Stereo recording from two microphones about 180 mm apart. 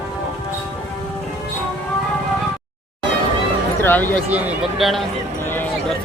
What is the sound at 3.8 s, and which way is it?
Speech, 10° left (ahead or behind).